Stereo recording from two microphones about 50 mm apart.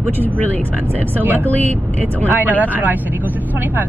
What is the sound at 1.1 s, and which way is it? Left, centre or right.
Speech, right.